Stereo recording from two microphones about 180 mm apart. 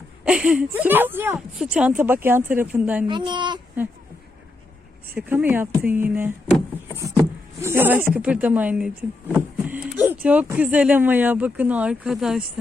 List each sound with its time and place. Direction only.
0.3 s speech: 5° right (ahead or behind)
3.1 s speech: 25° right (ahead or behind)
5.1 s speech: 10° right (ahead or behind)
7.6 s speech: 10° right (ahead or behind)